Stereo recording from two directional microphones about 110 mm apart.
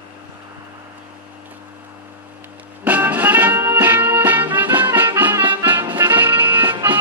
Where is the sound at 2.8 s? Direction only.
15° right (ahead or behind).